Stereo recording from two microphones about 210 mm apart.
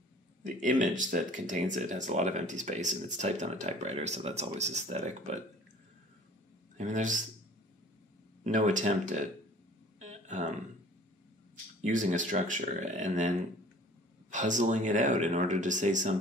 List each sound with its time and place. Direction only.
0.6 s speech: 35° right (ahead or behind)
6.8 s speech: 35° right (ahead or behind)
8.5 s speech: 35° right (ahead or behind)
9.9 s a sound: 35° right (ahead or behind)
11.8 s speech: 35° right (ahead or behind)
14.3 s speech: 35° right (ahead or behind)